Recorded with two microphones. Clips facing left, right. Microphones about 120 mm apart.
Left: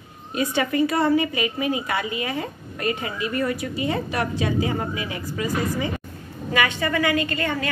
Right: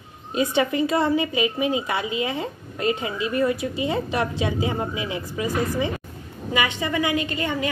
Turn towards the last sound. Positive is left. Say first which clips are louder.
# even
turn(degrees=-20)  # may be behind; listen again after turning